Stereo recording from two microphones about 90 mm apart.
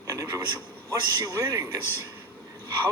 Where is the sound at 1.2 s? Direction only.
45° right (ahead or behind).